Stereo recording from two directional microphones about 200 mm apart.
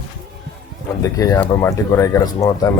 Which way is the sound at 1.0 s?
15° left (ahead or behind).